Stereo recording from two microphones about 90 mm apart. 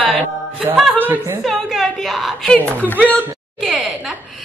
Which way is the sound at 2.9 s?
20° right (ahead or behind).